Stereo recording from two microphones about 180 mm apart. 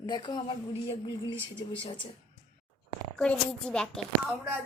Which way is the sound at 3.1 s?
5° left (ahead or behind).